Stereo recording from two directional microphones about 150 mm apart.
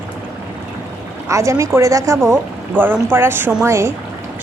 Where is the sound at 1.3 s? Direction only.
20° right (ahead or behind).